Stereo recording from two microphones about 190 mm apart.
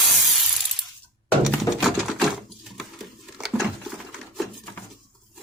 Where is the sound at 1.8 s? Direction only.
Centre (ahead or behind).